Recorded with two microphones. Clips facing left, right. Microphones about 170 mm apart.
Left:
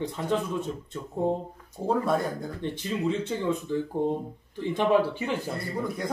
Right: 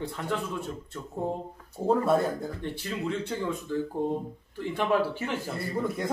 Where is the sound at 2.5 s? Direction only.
20° left (ahead or behind).